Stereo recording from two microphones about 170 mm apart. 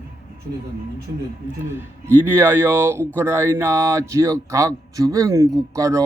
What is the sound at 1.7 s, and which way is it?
Speech, 10° right (ahead or behind).